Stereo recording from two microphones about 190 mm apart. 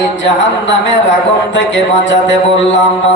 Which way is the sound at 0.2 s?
75° left (ahead or behind).